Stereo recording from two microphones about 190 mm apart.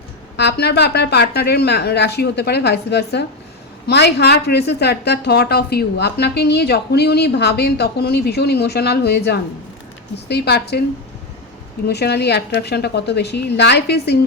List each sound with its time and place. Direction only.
0.3 s a woman's voice: 60° left (ahead or behind)
11.9 s a woman's voice: 60° left (ahead or behind)